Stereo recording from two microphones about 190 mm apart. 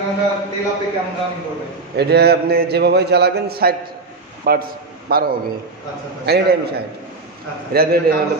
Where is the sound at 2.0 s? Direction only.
60° right (ahead or behind).